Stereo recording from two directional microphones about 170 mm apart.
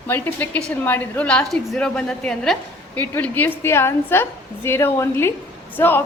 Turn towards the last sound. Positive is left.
turn(degrees=10)  # may be behind; listen again after turning